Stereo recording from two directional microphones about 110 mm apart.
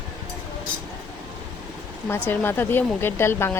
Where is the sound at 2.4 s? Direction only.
20° left (ahead or behind).